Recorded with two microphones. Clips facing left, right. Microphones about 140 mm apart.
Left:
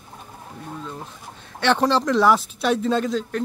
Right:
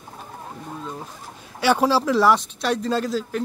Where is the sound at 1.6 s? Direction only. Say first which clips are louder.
Right 1 dB; 10° right (ahead or behind).